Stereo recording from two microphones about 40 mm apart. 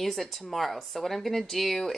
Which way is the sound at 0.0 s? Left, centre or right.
Centre.